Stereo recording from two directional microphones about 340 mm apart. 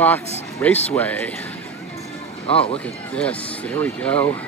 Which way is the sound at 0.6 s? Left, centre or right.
Centre.